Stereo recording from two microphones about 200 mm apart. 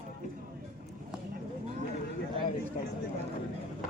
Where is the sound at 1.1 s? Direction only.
5° right (ahead or behind).